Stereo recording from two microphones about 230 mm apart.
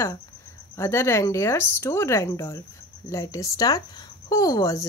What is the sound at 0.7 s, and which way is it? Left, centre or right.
Speech, centre.